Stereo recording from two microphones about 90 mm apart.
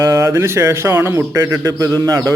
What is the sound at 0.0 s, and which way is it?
A man's voice, 35° right (ahead or behind).